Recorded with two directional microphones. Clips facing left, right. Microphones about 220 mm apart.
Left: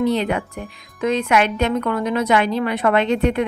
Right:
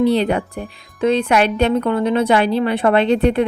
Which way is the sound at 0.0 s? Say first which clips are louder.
Right 4 dB; 35° right (ahead or behind).